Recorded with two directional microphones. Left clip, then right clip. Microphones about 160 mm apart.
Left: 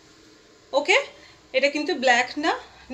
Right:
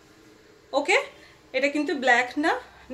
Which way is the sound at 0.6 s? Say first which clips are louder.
Left 2 dB; 15° right (ahead or behind).